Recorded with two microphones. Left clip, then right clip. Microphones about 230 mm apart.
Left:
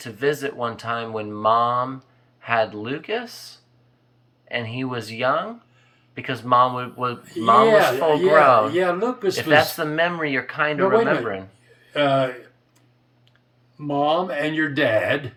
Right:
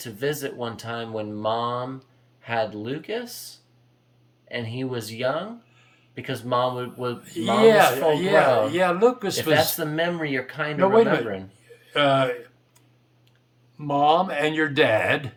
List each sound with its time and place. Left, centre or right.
0.0 s speech: centre
13.7 s speech: right